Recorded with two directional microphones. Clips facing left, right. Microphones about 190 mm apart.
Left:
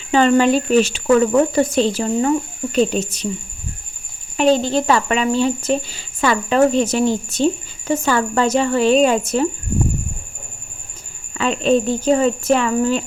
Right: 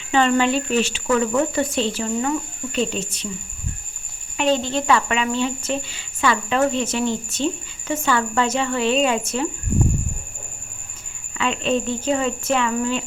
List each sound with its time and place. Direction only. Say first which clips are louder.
0.1 s speech: left 5 dB; 40° left (ahead or behind)
4.4 s speech: left 5 dB; 35° left (ahead or behind)
11.3 s speech: left 5 dB; 40° left (ahead or behind)